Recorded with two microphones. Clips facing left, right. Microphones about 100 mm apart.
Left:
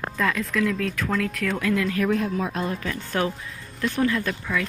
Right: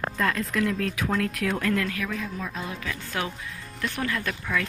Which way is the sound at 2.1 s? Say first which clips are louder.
Left 9 dB; 60° left (ahead or behind).